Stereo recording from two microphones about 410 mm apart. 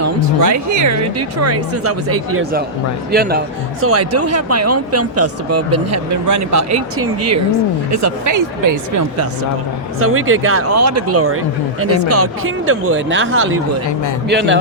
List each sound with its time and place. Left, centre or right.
0.0 s speech: right
3.1 s speech: right
10.0 s speech: right